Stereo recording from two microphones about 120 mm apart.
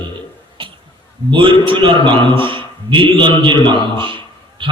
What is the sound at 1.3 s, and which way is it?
A man's voice, 45° right (ahead or behind).